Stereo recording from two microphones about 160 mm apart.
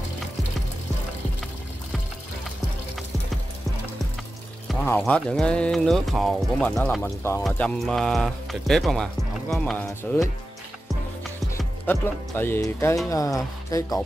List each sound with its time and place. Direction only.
4.8 s speech: 10° left (ahead or behind)
11.5 s speech: 15° left (ahead or behind)